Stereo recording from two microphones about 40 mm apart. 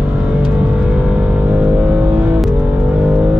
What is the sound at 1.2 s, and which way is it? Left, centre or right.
Vehicle, right.